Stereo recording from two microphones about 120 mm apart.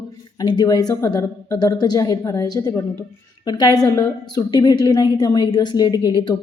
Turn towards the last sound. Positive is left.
turn(degrees=35)  # may be behind; listen again after turning